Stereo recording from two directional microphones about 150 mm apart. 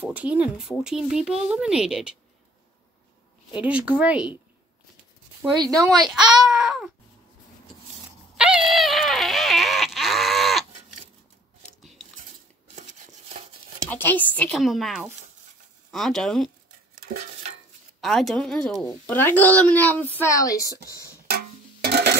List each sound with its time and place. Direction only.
0.0 s speech: 10° right (ahead or behind)
3.5 s speech: 10° right (ahead or behind)
5.6 s speech: 25° right (ahead or behind)
6.1 s speech: 5° right (ahead or behind)
8.4 s a sound: 5° right (ahead or behind)
12.7 s a sound: 50° right (ahead or behind)
13.8 s a woman's voice: 10° left (ahead or behind)
14.6 s speech: centre (ahead or behind)
18.0 s speech: centre (ahead or behind)
18.9 s a woman's voice: 15° left (ahead or behind)
21.8 s a sound: 90° right